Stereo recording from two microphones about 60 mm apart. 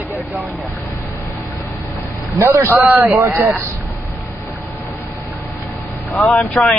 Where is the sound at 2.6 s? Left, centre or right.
Right.